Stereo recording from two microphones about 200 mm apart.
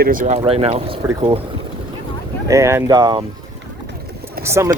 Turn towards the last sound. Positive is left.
turn(degrees=-15)  # may be behind; listen again after turning